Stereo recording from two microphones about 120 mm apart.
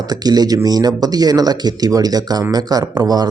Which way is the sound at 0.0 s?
35° right (ahead or behind).